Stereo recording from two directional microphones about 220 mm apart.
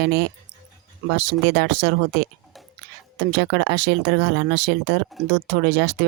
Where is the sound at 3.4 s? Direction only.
50° right (ahead or behind).